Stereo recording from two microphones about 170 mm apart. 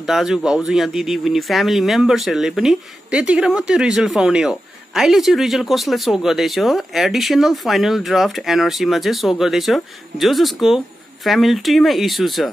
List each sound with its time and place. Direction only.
0.0 s speech: centre (ahead or behind)